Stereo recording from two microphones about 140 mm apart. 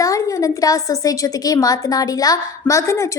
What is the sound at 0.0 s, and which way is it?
A woman's voice, 25° left (ahead or behind).